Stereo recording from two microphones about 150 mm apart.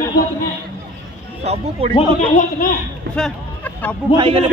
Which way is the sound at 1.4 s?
45° right (ahead or behind).